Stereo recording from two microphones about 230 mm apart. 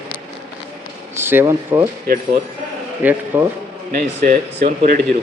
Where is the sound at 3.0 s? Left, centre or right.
Centre.